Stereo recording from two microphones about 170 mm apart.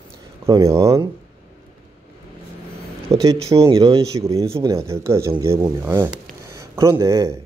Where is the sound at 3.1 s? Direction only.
25° right (ahead or behind).